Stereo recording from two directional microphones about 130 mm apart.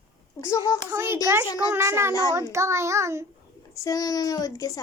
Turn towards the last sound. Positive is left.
turn(degrees=25)  # may be behind; listen again after turning